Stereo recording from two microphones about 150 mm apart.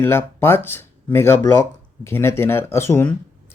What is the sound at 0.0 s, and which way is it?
Speech, 15° left (ahead or behind).